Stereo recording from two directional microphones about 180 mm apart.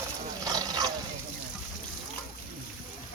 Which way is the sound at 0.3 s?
20° right (ahead or behind).